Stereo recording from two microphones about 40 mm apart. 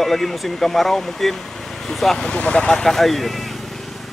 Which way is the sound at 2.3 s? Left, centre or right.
Left.